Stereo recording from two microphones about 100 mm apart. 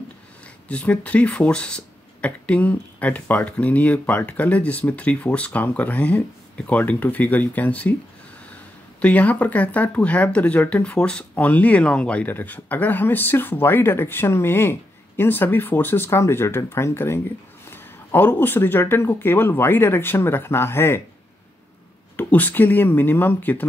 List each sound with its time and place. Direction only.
0.7 s speech: 10° left (ahead or behind)
9.0 s speech: 15° left (ahead or behind)
22.1 s speech: 20° left (ahead or behind)